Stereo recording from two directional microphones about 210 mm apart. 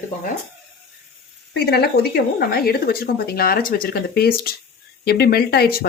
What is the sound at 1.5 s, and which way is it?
Speech, 50° left (ahead or behind).